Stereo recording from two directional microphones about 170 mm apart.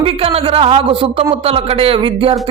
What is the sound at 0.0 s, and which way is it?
A man's voice, 35° right (ahead or behind).